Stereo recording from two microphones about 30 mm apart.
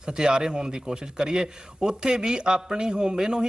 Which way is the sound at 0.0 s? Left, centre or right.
Right.